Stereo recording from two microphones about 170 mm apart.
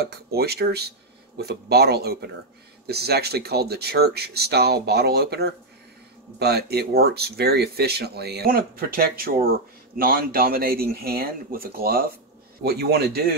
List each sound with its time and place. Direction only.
0.0 s speech: 65° right (ahead or behind)